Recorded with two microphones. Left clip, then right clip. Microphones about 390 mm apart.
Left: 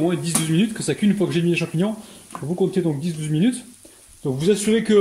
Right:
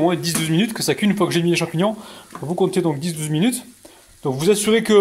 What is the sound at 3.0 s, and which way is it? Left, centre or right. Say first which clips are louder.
Speech: right 1 dB; centre.